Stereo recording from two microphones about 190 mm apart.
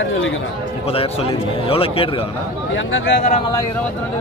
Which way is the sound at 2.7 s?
90° left.